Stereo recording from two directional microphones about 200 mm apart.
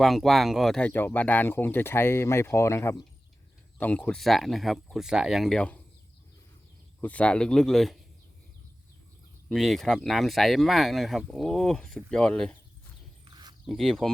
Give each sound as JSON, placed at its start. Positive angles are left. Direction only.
{"t": 0.0, "sound": "speech", "side_deg": 0}
{"t": 7.0, "sound": "speech", "side_deg": 5}
{"t": 9.5, "sound": "speech", "side_deg": 0}
{"t": 13.2, "sound": "a sound", "side_deg": -20}
{"t": 13.7, "sound": "speech", "side_deg": 0}